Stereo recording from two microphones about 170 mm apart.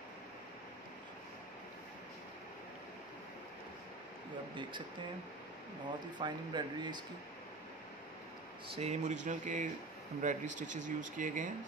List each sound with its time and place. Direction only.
6.1 s speech: 25° right (ahead or behind)
8.7 s speech: 40° right (ahead or behind)